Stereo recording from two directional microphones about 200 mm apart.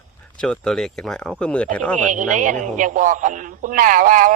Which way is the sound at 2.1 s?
40° right (ahead or behind).